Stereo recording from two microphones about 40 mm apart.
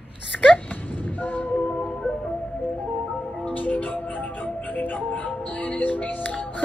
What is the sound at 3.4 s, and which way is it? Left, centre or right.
Music, left.